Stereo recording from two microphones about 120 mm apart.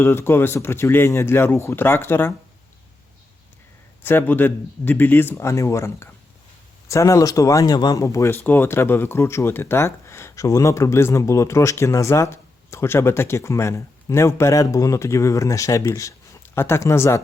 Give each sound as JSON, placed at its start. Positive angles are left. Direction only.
{"t": 0.0, "sound": "speech", "side_deg": 20}
{"t": 4.0, "sound": "speech", "side_deg": 15}